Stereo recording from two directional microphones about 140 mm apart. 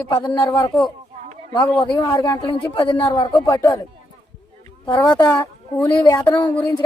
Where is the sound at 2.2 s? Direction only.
35° left (ahead or behind); by 3.7 s 20° left (ahead or behind).